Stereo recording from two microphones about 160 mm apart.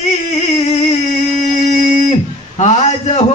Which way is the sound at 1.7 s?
50° left (ahead or behind).